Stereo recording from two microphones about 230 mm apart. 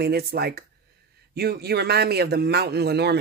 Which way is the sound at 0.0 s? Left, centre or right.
Right.